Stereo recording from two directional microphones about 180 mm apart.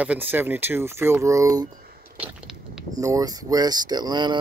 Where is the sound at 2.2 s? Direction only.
5° right (ahead or behind).